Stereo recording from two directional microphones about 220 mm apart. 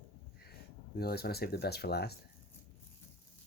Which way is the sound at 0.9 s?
45° left (ahead or behind).